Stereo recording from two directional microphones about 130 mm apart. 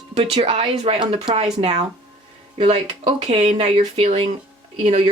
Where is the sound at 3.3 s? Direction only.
55° right (ahead or behind).